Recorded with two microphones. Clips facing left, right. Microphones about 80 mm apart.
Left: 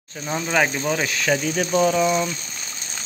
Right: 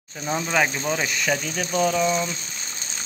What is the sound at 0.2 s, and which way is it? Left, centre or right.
Speech, centre.